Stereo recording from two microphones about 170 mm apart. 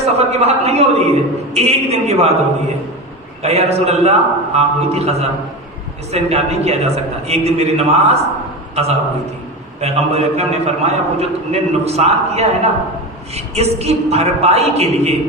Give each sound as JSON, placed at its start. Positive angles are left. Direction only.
{"t": 0.0, "sound": "a man's voice", "side_deg": -40}
{"t": 3.4, "sound": "a man's voice", "side_deg": -40}
{"t": 9.8, "sound": "a man's voice", "side_deg": -40}